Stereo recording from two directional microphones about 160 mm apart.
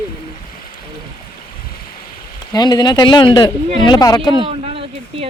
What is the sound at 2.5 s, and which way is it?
Speech, 25° left (ahead or behind).